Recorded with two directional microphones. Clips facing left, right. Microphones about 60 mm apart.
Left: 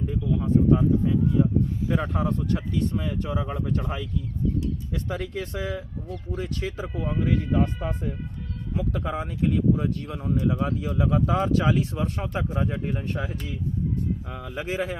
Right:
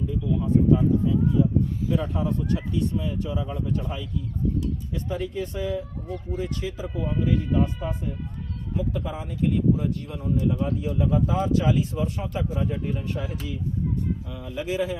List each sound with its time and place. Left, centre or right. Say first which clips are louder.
0.1 s speech: even; left
8.7 s speech: left 1 dB; left